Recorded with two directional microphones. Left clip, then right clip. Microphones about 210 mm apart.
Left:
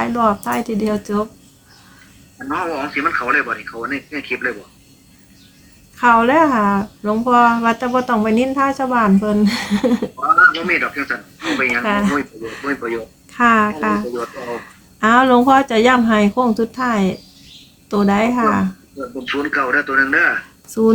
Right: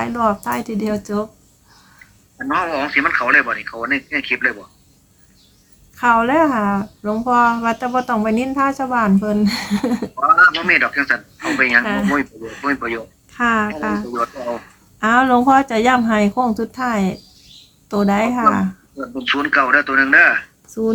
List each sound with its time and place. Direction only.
0.0 s speech: centre (ahead or behind)
2.5 s speech: 40° right (ahead or behind)
6.0 s speech: centre (ahead or behind)
10.2 s speech: 40° right (ahead or behind)
11.9 s speech: centre (ahead or behind)
12.6 s speech: 40° right (ahead or behind)
13.3 s speech: 5° left (ahead or behind)
15.0 s speech: centre (ahead or behind)
19.2 s speech: 40° right (ahead or behind)